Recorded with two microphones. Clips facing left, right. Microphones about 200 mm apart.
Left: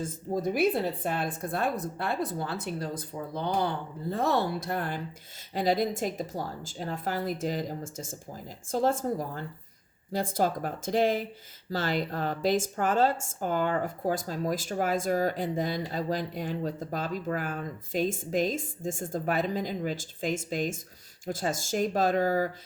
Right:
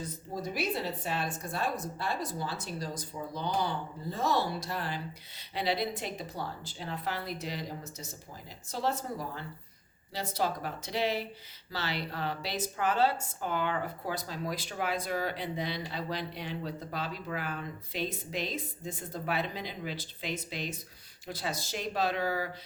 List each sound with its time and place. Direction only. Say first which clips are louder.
0.0 s a woman's voice: left 7 dB; 50° left (ahead or behind)